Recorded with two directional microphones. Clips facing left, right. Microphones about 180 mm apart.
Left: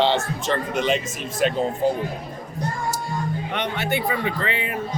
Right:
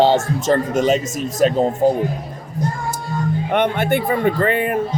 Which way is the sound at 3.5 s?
50° right (ahead or behind).